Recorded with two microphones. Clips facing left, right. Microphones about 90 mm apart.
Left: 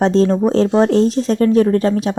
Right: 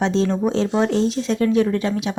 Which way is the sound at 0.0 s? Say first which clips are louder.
Left 6 dB; 40° left (ahead or behind).